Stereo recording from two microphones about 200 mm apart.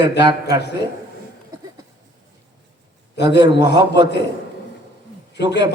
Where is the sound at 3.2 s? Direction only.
60° left (ahead or behind).